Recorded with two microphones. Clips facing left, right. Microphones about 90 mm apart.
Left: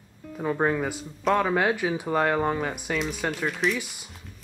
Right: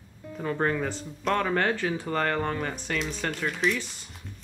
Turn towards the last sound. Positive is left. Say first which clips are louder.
# left 1 dB
turn(degrees=10)  # may be behind; listen again after turning